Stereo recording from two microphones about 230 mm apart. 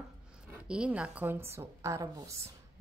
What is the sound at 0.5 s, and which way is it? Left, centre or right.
A woman's voice, centre.